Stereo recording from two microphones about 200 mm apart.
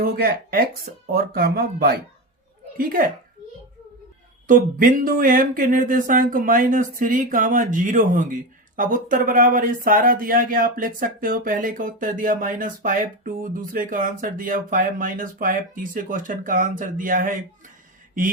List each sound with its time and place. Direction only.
0.0 s speech: 45° right (ahead or behind)
4.4 s speech: 40° right (ahead or behind)